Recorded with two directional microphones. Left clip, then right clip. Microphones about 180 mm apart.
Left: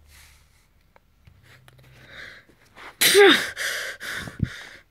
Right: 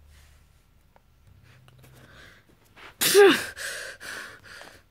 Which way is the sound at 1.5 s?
25° left (ahead or behind).